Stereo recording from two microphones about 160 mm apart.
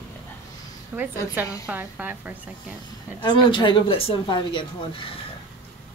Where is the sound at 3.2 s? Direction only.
30° left (ahead or behind).